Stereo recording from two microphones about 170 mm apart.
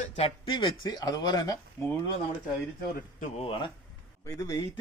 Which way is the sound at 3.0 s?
50° left (ahead or behind).